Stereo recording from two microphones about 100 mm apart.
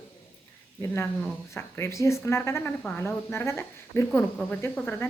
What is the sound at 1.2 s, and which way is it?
Speech, 25° left (ahead or behind).